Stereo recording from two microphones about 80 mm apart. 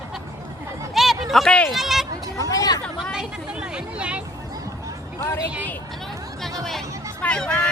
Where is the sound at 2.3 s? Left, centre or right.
Left.